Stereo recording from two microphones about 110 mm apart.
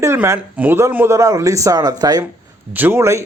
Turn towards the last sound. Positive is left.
turn(degrees=-25)  # may be behind; listen again after turning